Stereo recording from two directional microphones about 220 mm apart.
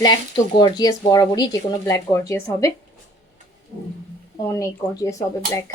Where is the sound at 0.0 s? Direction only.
20° left (ahead or behind).